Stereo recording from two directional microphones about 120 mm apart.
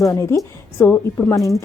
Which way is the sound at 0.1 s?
25° left (ahead or behind).